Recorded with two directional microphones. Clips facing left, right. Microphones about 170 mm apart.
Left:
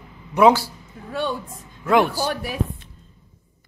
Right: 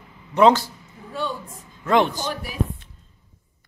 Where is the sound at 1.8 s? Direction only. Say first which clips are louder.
Left 1 dB; 10° left (ahead or behind).